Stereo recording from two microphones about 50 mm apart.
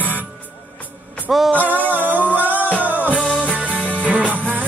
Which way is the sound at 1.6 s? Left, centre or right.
Right.